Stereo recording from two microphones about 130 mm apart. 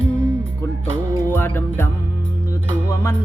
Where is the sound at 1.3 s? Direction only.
15° left (ahead or behind).